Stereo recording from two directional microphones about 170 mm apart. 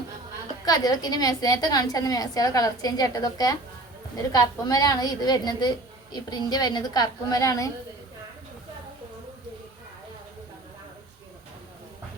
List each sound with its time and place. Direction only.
0.6 s a woman's voice: 20° left (ahead or behind)